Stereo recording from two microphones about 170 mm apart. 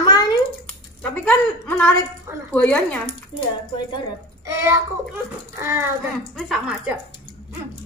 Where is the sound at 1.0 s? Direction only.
5° left (ahead or behind).